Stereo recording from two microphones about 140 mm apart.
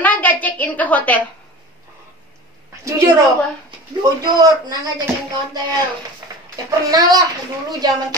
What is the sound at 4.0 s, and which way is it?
Speech, 30° right (ahead or behind).